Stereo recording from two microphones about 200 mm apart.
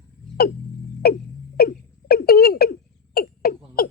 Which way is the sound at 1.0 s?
50° left (ahead or behind).